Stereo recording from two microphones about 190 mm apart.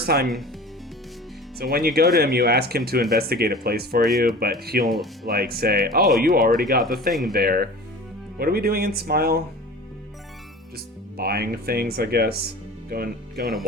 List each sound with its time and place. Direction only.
0.0 s speech: 55° right (ahead or behind)
1.5 s speech: 50° right (ahead or behind)
7.1 s speech: centre (ahead or behind)
7.3 s speech: 50° right (ahead or behind)
11.2 s speech: 55° right (ahead or behind)